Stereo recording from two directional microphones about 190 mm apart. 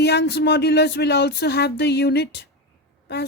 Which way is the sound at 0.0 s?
60° left (ahead or behind).